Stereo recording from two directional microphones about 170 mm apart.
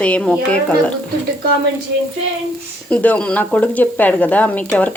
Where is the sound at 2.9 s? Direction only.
10° left (ahead or behind).